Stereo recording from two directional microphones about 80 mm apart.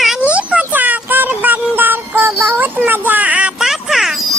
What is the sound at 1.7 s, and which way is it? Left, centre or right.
Child singing, right.